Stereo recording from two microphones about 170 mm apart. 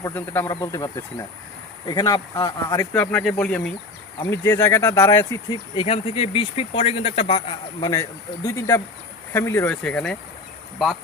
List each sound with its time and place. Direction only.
0.0 s speech: 10° left (ahead or behind)
3.0 s speech: 5° left (ahead or behind)
4.2 s speech: 15° left (ahead or behind)
5.8 s speech: 35° left (ahead or behind)
7.8 s speech: 20° left (ahead or behind)